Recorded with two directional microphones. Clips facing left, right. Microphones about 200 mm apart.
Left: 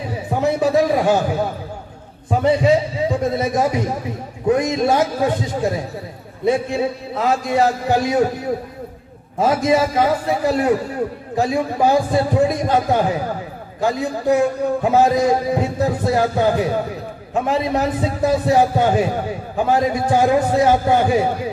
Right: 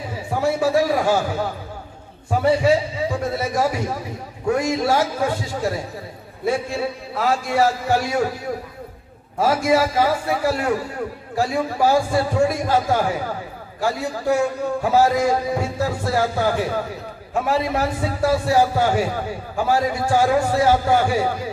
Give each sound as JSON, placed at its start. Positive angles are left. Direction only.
{"t": 0.3, "sound": "a man's voice", "side_deg": 20}
{"t": 2.4, "sound": "a man's voice", "side_deg": 20}
{"t": 9.4, "sound": "a man's voice", "side_deg": 20}